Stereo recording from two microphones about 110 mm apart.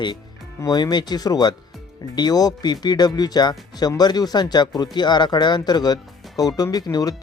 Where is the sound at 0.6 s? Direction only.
40° left (ahead or behind).